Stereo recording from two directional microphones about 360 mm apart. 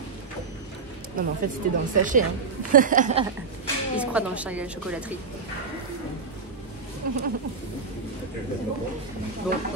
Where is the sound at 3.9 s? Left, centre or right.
Centre.